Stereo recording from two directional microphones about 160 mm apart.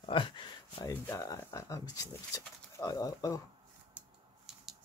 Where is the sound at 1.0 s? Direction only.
20° left (ahead or behind).